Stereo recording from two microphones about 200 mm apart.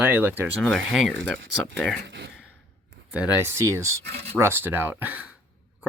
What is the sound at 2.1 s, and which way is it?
Speech, 65° right (ahead or behind).